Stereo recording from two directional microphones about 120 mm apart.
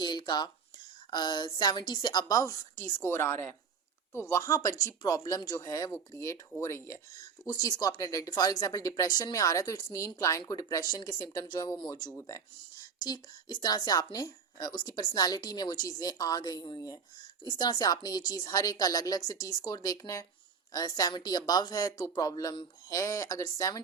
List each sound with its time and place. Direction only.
0.0 s a sound: 40° left (ahead or behind)
1.1 s a woman's voice: 35° left (ahead or behind)
12.1 s speech: 25° left (ahead or behind)
13.0 s a woman's voice: 35° left (ahead or behind)